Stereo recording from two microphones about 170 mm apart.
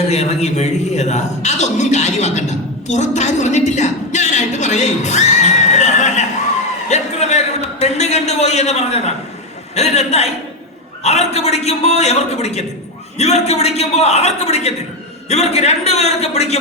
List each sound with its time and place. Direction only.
0.1 s a man's voice: 40° left (ahead or behind)